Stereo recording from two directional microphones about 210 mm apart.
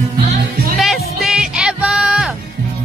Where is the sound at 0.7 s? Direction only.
Centre (ahead or behind).